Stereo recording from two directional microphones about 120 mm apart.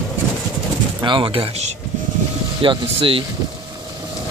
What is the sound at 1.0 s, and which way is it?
Speech, 40° right (ahead or behind).